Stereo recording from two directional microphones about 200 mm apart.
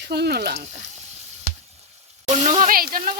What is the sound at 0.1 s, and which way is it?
Speech, 55° right (ahead or behind).